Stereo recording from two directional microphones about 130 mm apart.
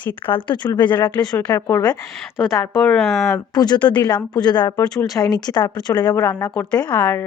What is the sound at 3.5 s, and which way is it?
Speech, 30° left (ahead or behind).